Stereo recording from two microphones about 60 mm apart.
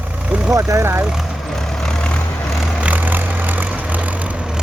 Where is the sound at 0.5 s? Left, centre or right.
Right.